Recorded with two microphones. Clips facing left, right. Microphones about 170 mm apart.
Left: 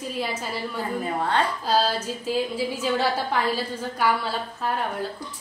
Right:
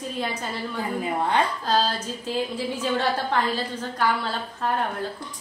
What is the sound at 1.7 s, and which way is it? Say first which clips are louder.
A woman's voice: left 1 dB; 10° left (ahead or behind).